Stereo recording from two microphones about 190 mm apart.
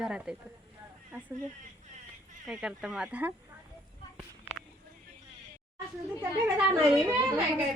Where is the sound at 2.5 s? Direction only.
5° right (ahead or behind).